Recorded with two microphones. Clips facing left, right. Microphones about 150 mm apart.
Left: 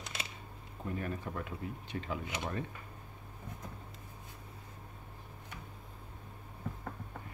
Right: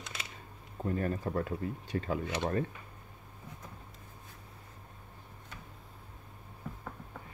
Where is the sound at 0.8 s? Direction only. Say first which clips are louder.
Right 5 dB; 40° right (ahead or behind).